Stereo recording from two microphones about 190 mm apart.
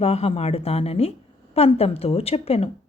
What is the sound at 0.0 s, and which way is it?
A woman's voice, 30° left (ahead or behind).